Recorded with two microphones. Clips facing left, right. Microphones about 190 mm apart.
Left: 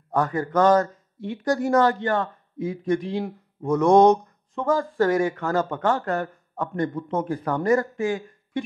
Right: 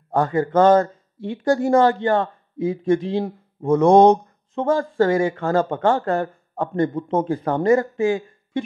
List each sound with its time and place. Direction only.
0.1 s speech: 25° right (ahead or behind)